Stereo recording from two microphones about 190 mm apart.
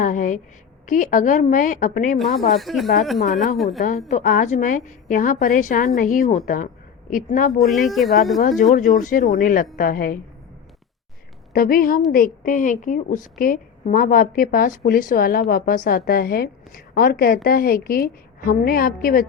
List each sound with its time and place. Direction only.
0.0 s a woman's voice: 45° left (ahead or behind)
2.6 s speech: centre (ahead or behind)
3.8 s a woman's voice: 50° left (ahead or behind)
7.6 s speech: centre (ahead or behind)
8.4 s a woman's voice: 45° left (ahead or behind)
11.5 s a woman's voice: 50° left (ahead or behind)